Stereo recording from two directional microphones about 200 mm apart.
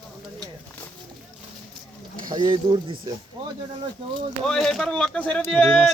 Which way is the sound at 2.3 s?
20° right (ahead or behind).